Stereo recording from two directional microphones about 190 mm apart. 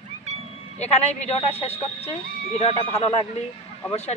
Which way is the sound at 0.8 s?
35° left (ahead or behind).